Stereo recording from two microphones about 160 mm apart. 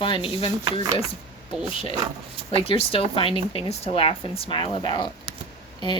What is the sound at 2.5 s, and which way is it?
Speech, 35° left (ahead or behind).